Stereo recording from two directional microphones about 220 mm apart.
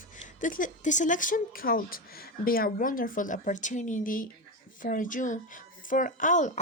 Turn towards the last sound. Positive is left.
turn(degrees=35)  # may be behind; listen again after turning